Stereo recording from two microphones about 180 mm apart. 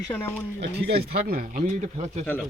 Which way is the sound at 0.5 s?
60° right (ahead or behind).